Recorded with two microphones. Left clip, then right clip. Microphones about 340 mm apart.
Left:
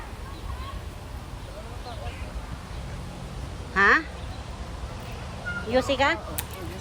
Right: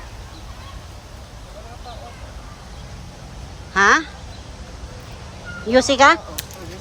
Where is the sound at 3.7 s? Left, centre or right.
Centre.